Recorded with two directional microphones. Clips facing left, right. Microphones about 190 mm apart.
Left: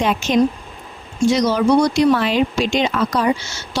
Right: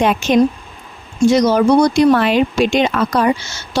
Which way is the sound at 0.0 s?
60° right (ahead or behind).